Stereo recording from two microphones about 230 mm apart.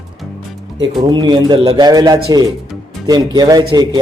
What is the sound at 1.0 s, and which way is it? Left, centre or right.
A man's voice, centre.